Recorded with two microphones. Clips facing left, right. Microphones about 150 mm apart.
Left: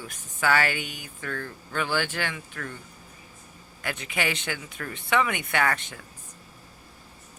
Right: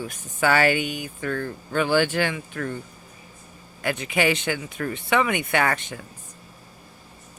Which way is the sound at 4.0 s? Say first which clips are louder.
Right 7 dB; 10° right (ahead or behind).